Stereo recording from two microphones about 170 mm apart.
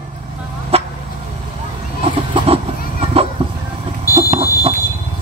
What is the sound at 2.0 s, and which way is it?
Chicken, 35° right (ahead or behind).